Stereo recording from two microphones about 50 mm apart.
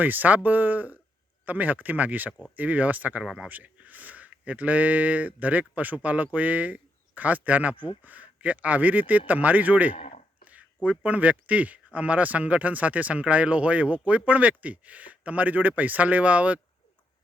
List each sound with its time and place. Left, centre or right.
0.0 s speech: right
3.2 s speech: centre
3.5 s speech: right
10.4 s a sound: right
10.8 s speech: right